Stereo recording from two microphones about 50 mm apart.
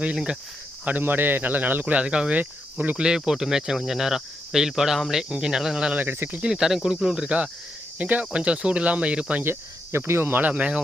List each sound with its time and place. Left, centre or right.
1.0 s speech: right
2.4 s speech: right
3.0 s speech: centre
5.9 s speech: right
6.4 s speech: centre
9.4 s cricket: right
10.3 s speech: right